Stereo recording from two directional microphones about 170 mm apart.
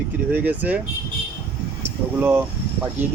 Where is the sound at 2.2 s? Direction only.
10° right (ahead or behind).